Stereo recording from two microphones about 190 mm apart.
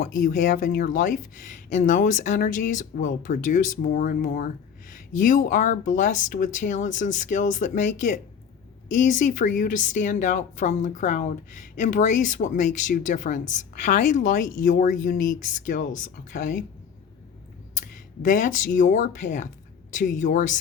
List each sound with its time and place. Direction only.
0.0 s a woman's voice: 45° left (ahead or behind)
17.9 s a woman's voice: 45° left (ahead or behind)